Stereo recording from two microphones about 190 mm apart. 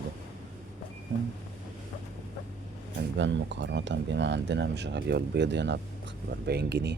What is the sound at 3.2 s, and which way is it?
Speech, 70° right (ahead or behind).